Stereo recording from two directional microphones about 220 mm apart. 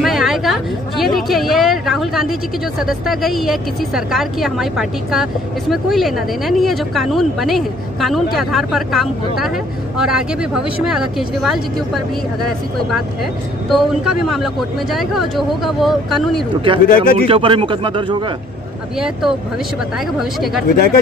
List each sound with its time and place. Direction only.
0.0 s a sound: centre (ahead or behind)
2.8 s speech: centre (ahead or behind)
13.7 s speech: centre (ahead or behind)
16.8 s speech: 40° left (ahead or behind)
17.3 s speech: 25° right (ahead or behind)
18.9 s speech: 5° right (ahead or behind)
20.6 s speech: 45° left (ahead or behind)